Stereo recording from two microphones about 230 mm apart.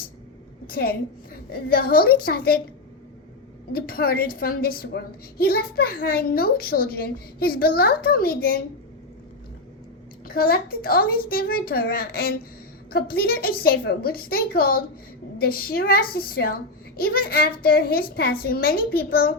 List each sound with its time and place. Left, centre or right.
0.7 s a woman's voice: left
3.7 s a woman's voice: left
10.2 s a woman's voice: left